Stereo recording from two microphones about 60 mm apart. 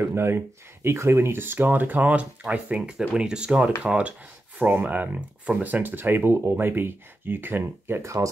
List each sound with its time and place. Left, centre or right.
0.1 s speech: right; by 4.1 s centre
4.6 s speech: right
8.0 s speech: right